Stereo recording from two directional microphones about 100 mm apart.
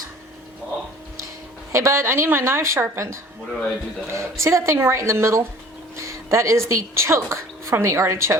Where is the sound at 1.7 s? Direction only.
30° right (ahead or behind).